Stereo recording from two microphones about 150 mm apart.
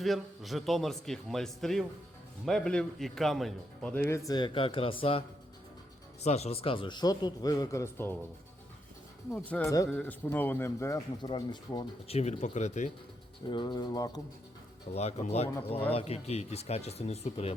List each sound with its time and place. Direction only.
0.0 s a man's voice: centre (ahead or behind)
4.3 s speech: 30° left (ahead or behind)
6.2 s speech: 45° left (ahead or behind); by 8.1 s 15° left (ahead or behind)
9.5 s a man's voice: 20° left (ahead or behind)
11.2 s speech: 30° left (ahead or behind)
12.0 s speech: 45° left (ahead or behind)
13.5 s speech: 30° left (ahead or behind)
14.9 s speech: 45° left (ahead or behind)